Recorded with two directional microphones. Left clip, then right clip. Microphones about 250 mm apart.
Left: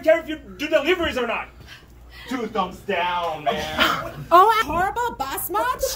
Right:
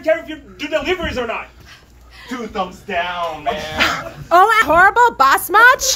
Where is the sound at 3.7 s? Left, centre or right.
Centre.